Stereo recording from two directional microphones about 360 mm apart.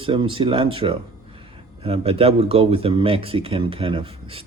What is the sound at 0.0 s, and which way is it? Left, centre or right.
Speech, centre.